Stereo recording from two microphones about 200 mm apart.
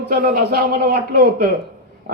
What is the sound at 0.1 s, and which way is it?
A man's voice, 50° right (ahead or behind).